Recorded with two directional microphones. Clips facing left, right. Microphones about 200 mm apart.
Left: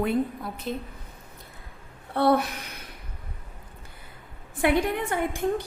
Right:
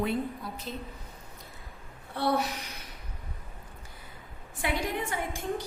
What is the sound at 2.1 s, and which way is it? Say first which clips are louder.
Speech: left 6 dB; 55° left (ahead or behind).